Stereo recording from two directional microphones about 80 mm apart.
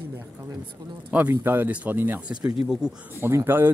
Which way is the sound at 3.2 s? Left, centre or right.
Right.